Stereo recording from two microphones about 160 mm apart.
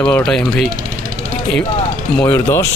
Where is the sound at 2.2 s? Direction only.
15° left (ahead or behind).